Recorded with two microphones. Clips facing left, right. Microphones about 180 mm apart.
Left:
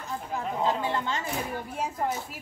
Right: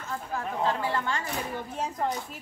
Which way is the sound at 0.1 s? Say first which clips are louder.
Left 1 dB; 20° left (ahead or behind).